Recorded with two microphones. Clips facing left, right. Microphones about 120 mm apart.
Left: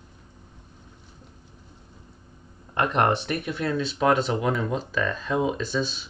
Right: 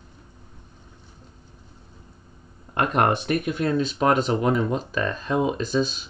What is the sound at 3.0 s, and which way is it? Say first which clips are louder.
Speech: right 2 dB; 45° right (ahead or behind).